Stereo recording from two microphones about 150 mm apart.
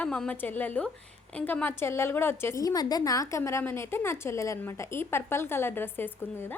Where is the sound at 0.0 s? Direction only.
10° left (ahead or behind).